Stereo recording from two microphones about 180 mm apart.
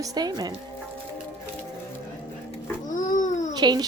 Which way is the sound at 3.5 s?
25° right (ahead or behind).